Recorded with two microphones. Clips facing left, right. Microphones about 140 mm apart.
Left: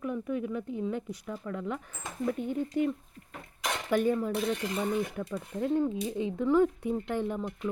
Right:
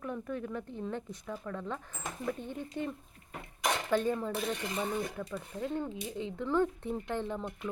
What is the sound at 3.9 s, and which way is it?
Speech, 15° left (ahead or behind).